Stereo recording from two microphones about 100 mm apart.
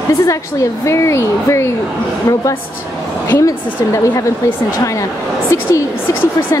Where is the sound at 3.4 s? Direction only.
35° left (ahead or behind).